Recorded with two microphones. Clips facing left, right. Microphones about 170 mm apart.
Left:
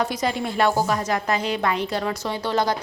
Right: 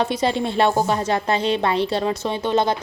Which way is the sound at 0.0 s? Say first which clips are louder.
Right 3 dB; 30° right (ahead or behind).